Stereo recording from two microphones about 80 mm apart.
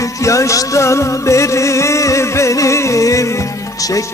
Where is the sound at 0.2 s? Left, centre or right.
Left.